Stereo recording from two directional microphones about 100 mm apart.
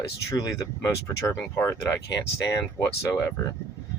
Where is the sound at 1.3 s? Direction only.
25° left (ahead or behind).